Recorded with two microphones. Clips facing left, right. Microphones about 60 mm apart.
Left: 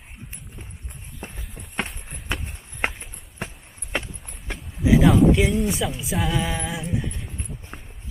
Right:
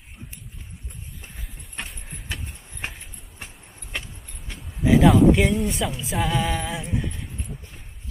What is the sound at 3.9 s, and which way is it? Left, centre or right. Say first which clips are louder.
Horse: left 6 dB; left.